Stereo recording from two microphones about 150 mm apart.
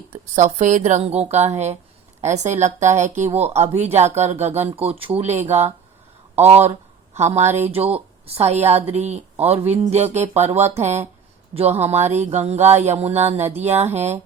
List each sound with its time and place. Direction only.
0.1 s speech: 50° right (ahead or behind)